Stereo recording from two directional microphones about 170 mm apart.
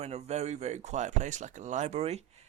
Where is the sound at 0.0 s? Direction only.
40° right (ahead or behind).